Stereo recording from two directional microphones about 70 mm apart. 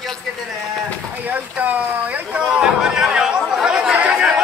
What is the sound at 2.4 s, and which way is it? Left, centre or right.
Chatter, centre.